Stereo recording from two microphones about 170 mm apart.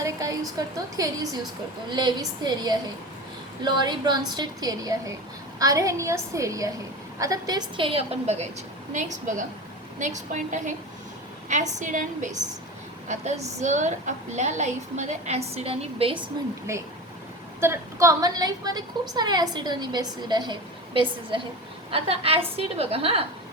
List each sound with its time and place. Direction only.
0.0 s a sound: 20° right (ahead or behind)
0.6 s a woman's voice: 20° right (ahead or behind); by 10.8 s 45° right (ahead or behind)
11.8 s a woman's voice: 50° right (ahead or behind); by 16.5 s 25° right (ahead or behind)
17.6 s a woman's voice: 15° right (ahead or behind); by 23.2 s 35° right (ahead or behind)